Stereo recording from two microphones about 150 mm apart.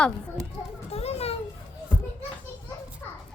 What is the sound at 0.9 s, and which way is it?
Children playing, 40° left (ahead or behind).